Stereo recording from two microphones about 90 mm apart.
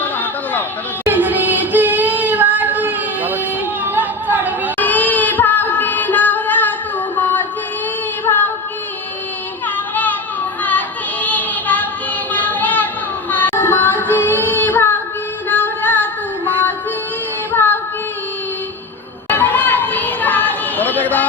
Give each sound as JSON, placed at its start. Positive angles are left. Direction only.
{"t": 0.0, "sound": "chatter", "side_deg": 20}
{"t": 1.0, "sound": "child singing", "side_deg": -20}
{"t": 3.8, "sound": "chatter", "side_deg": -20}
{"t": 4.8, "sound": "a sound", "side_deg": 20}
{"t": 8.2, "sound": "female singing", "side_deg": 20}
{"t": 9.6, "sound": "music", "side_deg": 20}
{"t": 10.6, "sound": "child singing", "side_deg": 20}
{"t": 12.3, "sound": "a sound", "side_deg": 20}
{"t": 13.3, "sound": "child singing", "side_deg": 20}
{"t": 15.4, "sound": "music", "side_deg": 20}
{"t": 17.5, "sound": "child singing", "side_deg": 20}
{"t": 19.3, "sound": "a sound", "side_deg": 20}